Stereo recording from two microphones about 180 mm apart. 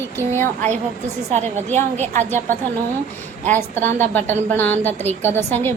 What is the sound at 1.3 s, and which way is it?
A woman's voice, 40° right (ahead or behind).